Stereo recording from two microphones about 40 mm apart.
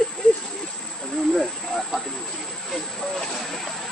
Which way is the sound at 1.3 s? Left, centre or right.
Centre.